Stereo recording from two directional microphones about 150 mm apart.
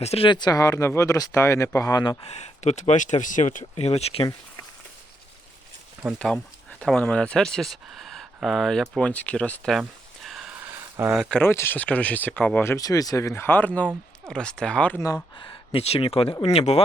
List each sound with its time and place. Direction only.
0.0 s speech: 40° left (ahead or behind); by 2.1 s 25° left (ahead or behind)
2.2 s speech: 50° left (ahead or behind)
6.1 s speech: 5° left (ahead or behind)
10.2 s a sound: 5° right (ahead or behind)
10.7 s a sound: 20° right (ahead or behind)
11.1 s speech: centre (ahead or behind)
11.3 s speech: 15° left (ahead or behind)
15.0 s speech: 30° left (ahead or behind)